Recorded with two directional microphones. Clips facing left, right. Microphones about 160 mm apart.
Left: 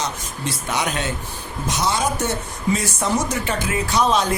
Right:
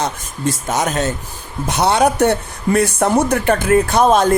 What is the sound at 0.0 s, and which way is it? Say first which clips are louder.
Speech: right 6 dB; 45° right (ahead or behind).